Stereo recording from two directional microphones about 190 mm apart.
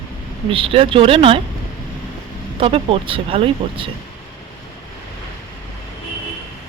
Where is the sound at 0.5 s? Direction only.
30° right (ahead or behind).